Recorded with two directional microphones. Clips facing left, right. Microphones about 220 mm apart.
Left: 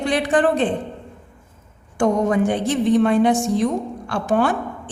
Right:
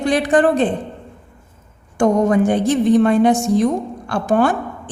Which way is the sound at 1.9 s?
45° right (ahead or behind).